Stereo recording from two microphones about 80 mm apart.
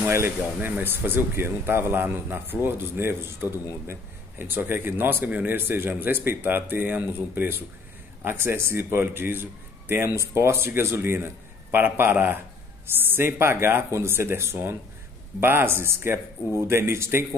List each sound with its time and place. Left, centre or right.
0.0 s speech: right